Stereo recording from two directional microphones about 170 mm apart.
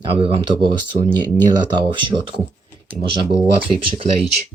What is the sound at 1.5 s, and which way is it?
Speech, 25° right (ahead or behind).